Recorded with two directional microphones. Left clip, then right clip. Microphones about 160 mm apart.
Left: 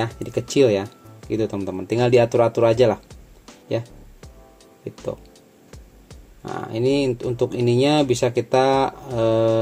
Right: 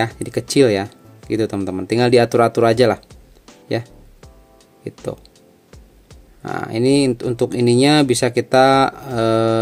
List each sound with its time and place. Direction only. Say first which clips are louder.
0.2 s speech: right 2 dB; 30° right (ahead or behind)
5.7 s music: left 2 dB; centre (ahead or behind)
6.6 s speech: right 4 dB; 35° right (ahead or behind)